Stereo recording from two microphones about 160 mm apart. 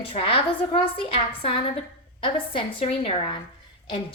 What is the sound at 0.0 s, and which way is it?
A woman's voice, 35° left (ahead or behind).